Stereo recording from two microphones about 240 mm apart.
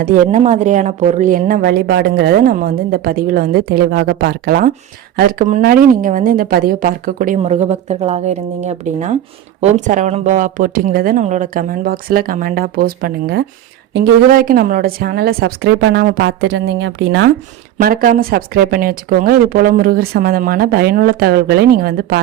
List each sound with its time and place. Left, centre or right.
0.0 s a woman's voice: right
17.7 s a woman's voice: right